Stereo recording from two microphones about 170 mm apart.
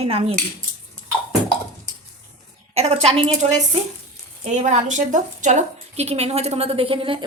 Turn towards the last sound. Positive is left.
turn(degrees=-30)  # may be behind; listen again after turning